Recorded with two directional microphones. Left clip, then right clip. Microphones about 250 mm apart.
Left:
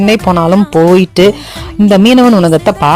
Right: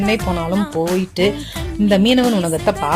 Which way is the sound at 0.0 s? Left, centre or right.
Left.